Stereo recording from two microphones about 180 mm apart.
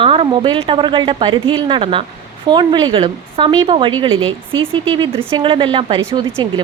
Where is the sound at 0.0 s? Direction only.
30° right (ahead or behind).